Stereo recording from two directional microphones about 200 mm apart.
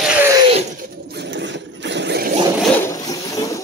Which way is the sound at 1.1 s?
60° right (ahead or behind).